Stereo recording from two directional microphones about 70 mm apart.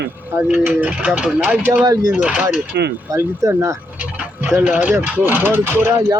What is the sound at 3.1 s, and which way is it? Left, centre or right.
Speech, right.